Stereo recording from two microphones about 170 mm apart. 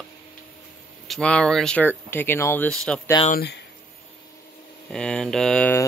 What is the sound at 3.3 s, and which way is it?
Speech, 70° left (ahead or behind).